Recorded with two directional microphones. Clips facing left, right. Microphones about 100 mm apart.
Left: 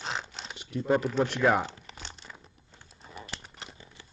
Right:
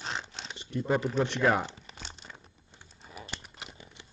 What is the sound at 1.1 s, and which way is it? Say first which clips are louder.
Crumpling: left 1 dB; 10° left (ahead or behind).